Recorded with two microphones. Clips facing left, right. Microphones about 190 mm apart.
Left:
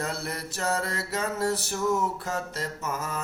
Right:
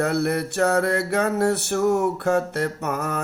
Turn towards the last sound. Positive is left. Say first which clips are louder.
# right 6 dB
turn(degrees=-65)  # may be behind; listen again after turning